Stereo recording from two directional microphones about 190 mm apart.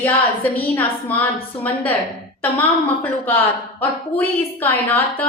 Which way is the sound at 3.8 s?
10° left (ahead or behind).